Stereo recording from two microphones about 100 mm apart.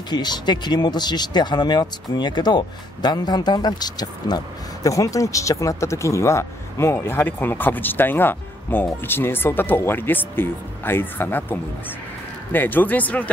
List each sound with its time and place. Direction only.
0.1 s speech: 45° left (ahead or behind); by 11.5 s 20° left (ahead or behind)
12.5 s speech: 20° left (ahead or behind)